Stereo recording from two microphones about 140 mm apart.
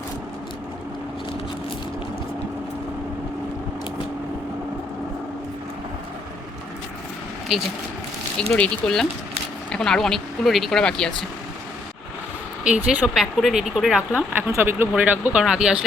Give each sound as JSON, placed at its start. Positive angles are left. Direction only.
{"t": 8.4, "sound": "speech", "side_deg": 5}
{"t": 12.6, "sound": "speech", "side_deg": -5}
{"t": 14.4, "sound": "speech", "side_deg": -15}